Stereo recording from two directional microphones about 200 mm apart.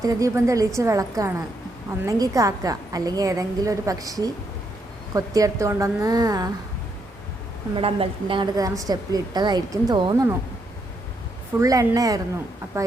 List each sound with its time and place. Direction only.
0.0 s a woman's voice: 15° right (ahead or behind)
7.8 s a woman's voice: 30° right (ahead or behind)
11.6 s a woman's voice: 15° right (ahead or behind)